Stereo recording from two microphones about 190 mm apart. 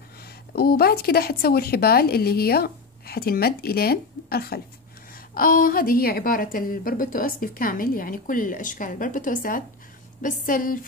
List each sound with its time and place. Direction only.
0.6 s a woman's voice: 55° left (ahead or behind)